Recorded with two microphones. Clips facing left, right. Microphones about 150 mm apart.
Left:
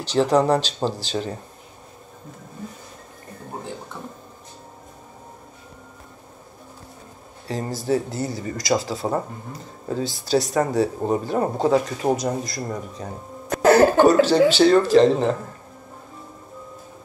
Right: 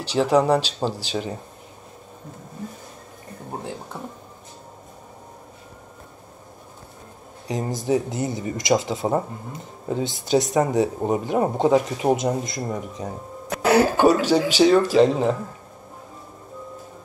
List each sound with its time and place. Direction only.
0.0 s speech: 10° right (ahead or behind)
7.4 s speech: 15° right (ahead or behind)